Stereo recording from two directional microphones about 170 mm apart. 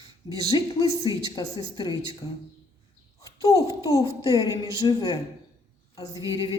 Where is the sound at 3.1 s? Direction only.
20° left (ahead or behind).